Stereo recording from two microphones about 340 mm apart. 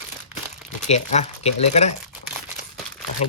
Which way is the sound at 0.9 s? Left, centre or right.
Centre.